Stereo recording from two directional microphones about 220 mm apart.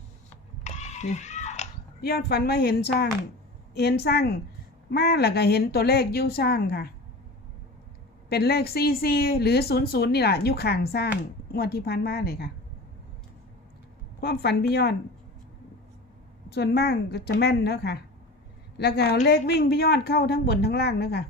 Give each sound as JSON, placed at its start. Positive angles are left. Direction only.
{"t": 0.6, "sound": "a sound", "side_deg": 30}
{"t": 2.0, "sound": "speech", "side_deg": 45}
{"t": 8.3, "sound": "speech", "side_deg": 45}
{"t": 14.2, "sound": "speech", "side_deg": 45}
{"t": 16.5, "sound": "speech", "side_deg": 45}